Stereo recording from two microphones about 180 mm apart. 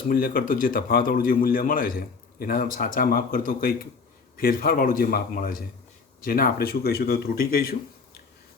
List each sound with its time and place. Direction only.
0.1 s a man's voice: 55° left (ahead or behind)